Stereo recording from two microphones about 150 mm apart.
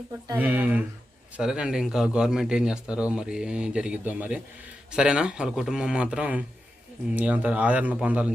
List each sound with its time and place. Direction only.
0.3 s a man's voice: 10° right (ahead or behind)